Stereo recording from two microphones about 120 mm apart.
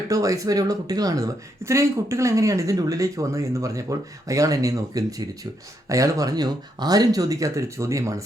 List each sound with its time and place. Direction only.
0.1 s speech: 25° right (ahead or behind)